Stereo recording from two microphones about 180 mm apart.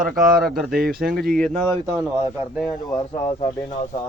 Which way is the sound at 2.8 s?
25° left (ahead or behind).